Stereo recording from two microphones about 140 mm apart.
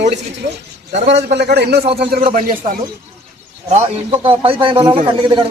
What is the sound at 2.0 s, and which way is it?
Speech, 90° right.